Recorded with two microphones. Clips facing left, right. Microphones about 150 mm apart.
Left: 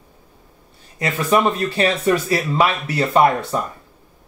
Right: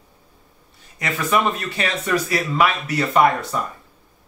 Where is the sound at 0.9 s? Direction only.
30° left (ahead or behind).